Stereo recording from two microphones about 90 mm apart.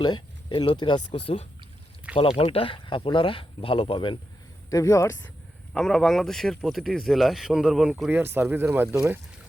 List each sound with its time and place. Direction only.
0.0 s speech: 55° left (ahead or behind)
2.1 s speech: 90° left; by 4.2 s 70° left (ahead or behind)
4.7 s speech: 35° left (ahead or behind)
5.8 s speech: 5° left (ahead or behind)
8.1 s speech: 25° right (ahead or behind)